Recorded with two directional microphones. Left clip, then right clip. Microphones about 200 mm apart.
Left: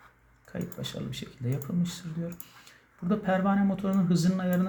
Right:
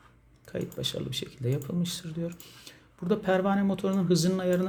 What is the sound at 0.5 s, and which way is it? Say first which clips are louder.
Speech: right 5 dB; 60° right (ahead or behind).